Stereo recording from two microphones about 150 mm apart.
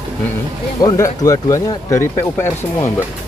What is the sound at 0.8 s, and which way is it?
Speech, 20° left (ahead or behind).